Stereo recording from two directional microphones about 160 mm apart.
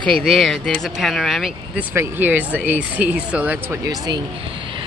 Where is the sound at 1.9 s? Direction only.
10° right (ahead or behind).